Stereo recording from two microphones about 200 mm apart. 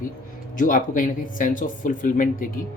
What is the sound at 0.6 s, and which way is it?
Speech, 40° left (ahead or behind).